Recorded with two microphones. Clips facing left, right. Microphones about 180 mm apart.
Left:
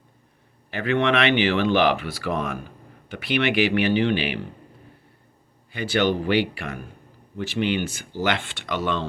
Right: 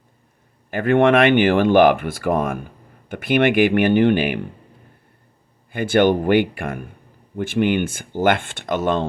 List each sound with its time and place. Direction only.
0.7 s speech: 50° right (ahead or behind)
5.7 s speech: 50° right (ahead or behind)